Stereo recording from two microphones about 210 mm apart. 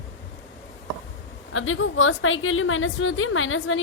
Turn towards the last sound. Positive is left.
turn(degrees=70)  # may be behind; listen again after turning